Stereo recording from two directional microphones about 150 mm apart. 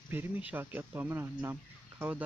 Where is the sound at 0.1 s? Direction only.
10° right (ahead or behind).